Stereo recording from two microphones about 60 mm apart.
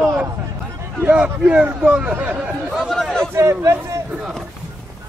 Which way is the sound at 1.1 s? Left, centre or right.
Right.